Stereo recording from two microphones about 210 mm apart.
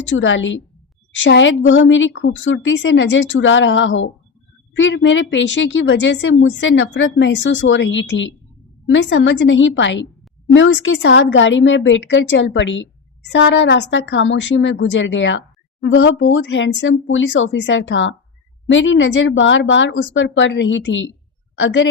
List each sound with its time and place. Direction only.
0.0 s speech: 65° left (ahead or behind)